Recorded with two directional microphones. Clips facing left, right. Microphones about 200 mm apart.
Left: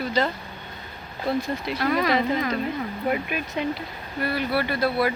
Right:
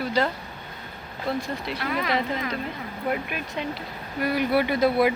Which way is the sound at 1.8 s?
40° left (ahead or behind).